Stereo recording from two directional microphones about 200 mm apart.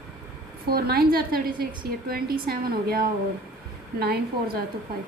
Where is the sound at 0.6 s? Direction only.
50° right (ahead or behind).